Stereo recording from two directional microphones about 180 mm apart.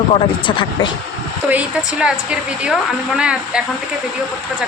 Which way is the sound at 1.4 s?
5° right (ahead or behind).